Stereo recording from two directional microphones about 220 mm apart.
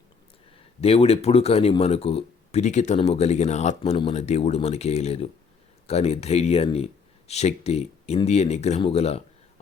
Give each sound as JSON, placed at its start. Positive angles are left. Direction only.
{"t": 0.8, "sound": "speech", "side_deg": 25}